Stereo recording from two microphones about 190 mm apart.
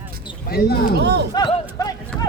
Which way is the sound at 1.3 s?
25° left (ahead or behind).